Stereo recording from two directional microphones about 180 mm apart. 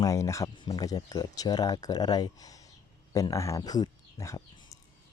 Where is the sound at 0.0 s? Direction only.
15° left (ahead or behind).